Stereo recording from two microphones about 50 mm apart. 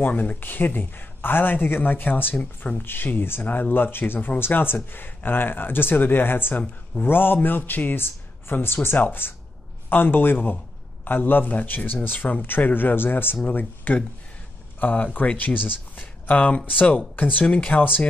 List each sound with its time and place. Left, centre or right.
0.1 s speech: left
0.4 s speech: left
13.5 s speech: left